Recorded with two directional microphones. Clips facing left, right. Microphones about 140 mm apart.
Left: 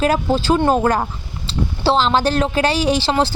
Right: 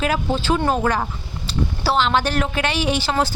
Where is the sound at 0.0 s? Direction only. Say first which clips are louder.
Left 4 dB; 40° left (ahead or behind).